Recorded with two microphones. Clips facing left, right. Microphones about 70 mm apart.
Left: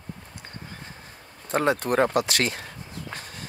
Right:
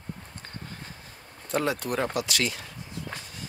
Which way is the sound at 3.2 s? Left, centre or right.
Left.